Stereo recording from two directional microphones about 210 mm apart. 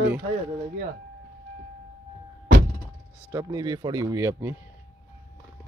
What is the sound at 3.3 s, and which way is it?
Speech, 15° right (ahead or behind).